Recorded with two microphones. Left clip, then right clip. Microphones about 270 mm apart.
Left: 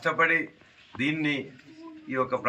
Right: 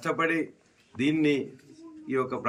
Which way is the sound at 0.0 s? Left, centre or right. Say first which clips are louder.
Left 3 dB; centre.